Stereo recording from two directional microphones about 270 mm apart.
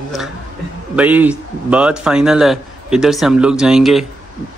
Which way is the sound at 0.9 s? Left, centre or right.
Centre.